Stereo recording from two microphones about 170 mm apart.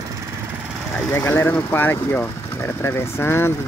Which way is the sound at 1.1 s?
15° left (ahead or behind).